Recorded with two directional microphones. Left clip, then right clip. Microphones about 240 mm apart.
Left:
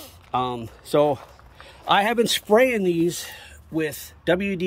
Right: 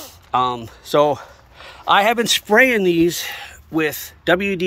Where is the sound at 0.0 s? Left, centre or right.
Centre.